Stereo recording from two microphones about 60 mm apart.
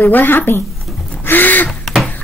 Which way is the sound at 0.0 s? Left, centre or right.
Left.